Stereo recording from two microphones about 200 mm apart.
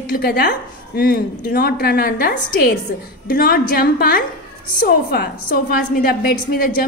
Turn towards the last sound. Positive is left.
turn(degrees=50)  # may be behind; listen again after turning